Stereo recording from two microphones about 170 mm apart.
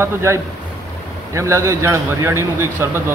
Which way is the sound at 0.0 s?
15° right (ahead or behind).